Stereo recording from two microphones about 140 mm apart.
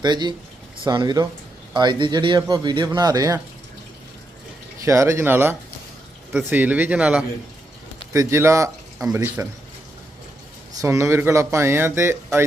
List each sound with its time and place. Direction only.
0.0 s speech: 30° right (ahead or behind)
4.8 s speech: 20° right (ahead or behind)
8.1 s speech: 20° right (ahead or behind)
10.8 s speech: 20° right (ahead or behind)